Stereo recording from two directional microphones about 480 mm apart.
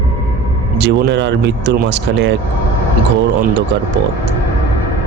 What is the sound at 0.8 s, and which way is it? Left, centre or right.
A man's voice, right.